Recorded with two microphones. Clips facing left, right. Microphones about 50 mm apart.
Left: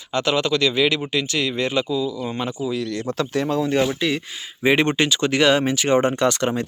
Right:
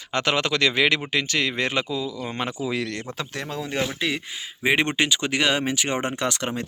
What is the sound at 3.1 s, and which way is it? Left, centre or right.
Speech, centre.